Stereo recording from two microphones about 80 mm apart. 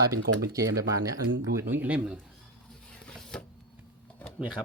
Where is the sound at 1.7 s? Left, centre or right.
Centre.